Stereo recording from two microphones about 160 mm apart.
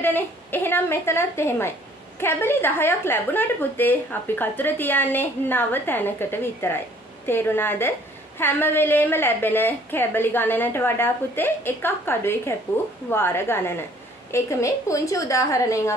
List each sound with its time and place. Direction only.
0.0 s a woman's voice: 15° left (ahead or behind)